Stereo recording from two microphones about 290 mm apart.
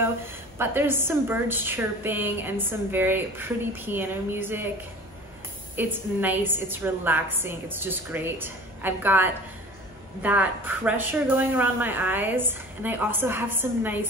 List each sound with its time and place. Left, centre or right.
0.0 s a woman's voice: centre
5.8 s a woman's voice: centre